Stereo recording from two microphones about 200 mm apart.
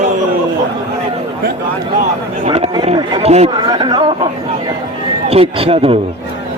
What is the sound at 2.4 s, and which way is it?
Speech, 35° right (ahead or behind).